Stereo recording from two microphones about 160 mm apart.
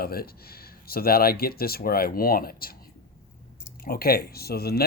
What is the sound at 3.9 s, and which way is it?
Speech, 70° left (ahead or behind).